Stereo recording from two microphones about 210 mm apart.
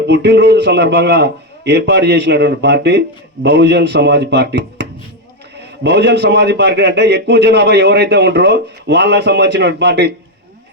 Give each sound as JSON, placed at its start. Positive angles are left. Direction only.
{"t": 0.1, "sound": "a man's voice", "side_deg": -55}